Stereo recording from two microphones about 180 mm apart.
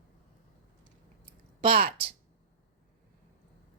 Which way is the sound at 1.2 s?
50° right (ahead or behind).